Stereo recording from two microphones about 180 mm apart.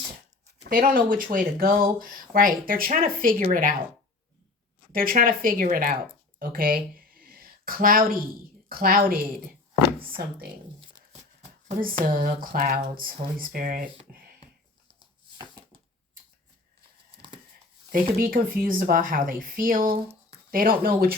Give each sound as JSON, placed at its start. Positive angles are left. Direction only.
{"t": 0.6, "sound": "speech", "side_deg": -55}
{"t": 4.9, "sound": "speech", "side_deg": -50}
{"t": 6.4, "sound": "a sound", "side_deg": -55}
{"t": 8.7, "sound": "speech", "side_deg": -50}
{"t": 12.0, "sound": "speech", "side_deg": -50}
{"t": 17.1, "sound": "a sound", "side_deg": -30}
{"t": 17.9, "sound": "speech", "side_deg": -55}